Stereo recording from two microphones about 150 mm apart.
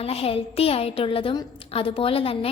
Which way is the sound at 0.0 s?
40° left (ahead or behind).